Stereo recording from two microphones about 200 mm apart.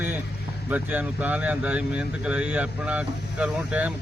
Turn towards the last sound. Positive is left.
turn(degrees=-5)  # may be behind; listen again after turning